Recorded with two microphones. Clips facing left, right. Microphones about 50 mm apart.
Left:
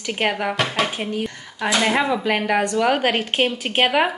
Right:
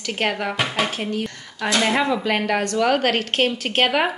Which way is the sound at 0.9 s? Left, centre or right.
Centre.